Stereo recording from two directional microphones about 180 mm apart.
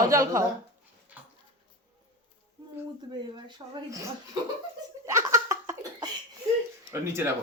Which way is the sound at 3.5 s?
20° right (ahead or behind).